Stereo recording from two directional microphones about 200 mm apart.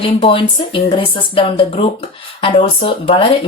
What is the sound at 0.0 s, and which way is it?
Speech, 25° left (ahead or behind).